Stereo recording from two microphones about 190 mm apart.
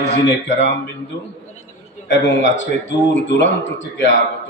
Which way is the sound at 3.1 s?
75° left (ahead or behind).